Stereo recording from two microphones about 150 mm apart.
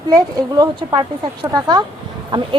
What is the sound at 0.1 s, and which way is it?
Speech, 25° right (ahead or behind).